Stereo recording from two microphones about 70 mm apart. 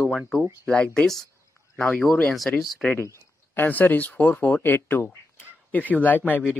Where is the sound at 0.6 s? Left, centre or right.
Centre.